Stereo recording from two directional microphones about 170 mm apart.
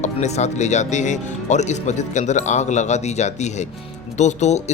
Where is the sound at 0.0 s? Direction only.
40° left (ahead or behind).